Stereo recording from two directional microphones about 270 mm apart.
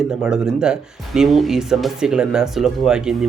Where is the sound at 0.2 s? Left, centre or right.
Centre.